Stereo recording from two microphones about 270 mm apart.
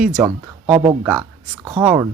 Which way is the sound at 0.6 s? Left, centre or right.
Right.